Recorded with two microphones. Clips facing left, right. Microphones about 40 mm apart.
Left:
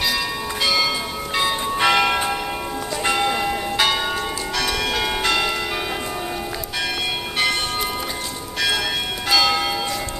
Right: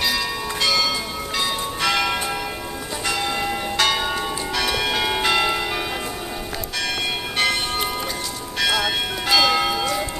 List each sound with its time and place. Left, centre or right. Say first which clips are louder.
0.0 s church bell: even; centre; by 3.3 s left
3.3 s church bell: left 1 dB; centre
8.5 s church bell: right 1 dB; centre